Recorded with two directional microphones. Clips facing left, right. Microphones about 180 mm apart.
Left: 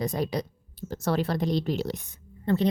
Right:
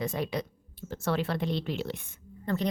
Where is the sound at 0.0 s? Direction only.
40° left (ahead or behind).